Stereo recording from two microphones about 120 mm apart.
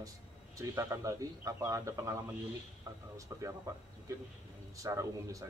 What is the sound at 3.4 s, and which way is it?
A man's voice, 25° right (ahead or behind).